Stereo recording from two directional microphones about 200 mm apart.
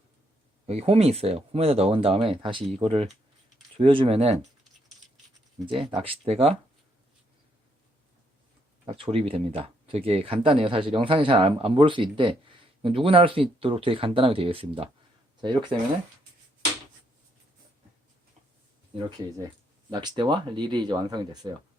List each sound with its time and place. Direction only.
0.7 s speech: 30° right (ahead or behind)
5.6 s speech: 25° right (ahead or behind)
8.9 s speech: 30° right (ahead or behind)
19.9 s speech: 20° right (ahead or behind)